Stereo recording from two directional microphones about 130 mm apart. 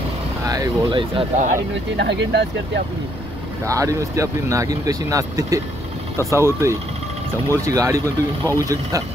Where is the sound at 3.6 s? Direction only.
25° right (ahead or behind).